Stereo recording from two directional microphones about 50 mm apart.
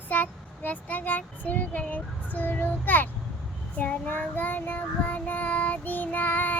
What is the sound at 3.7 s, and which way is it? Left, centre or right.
Child singing, left.